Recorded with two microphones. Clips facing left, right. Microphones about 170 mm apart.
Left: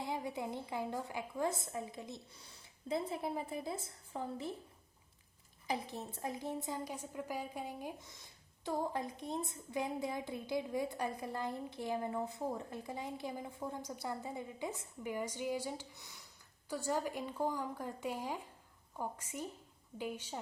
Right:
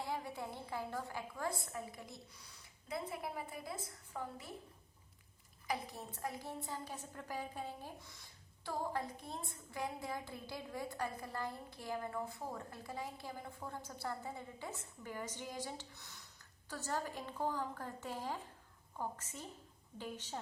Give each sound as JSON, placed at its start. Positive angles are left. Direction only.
{"t": 0.0, "sound": "a woman's voice", "side_deg": 20}
{"t": 5.6, "sound": "a woman's voice", "side_deg": 25}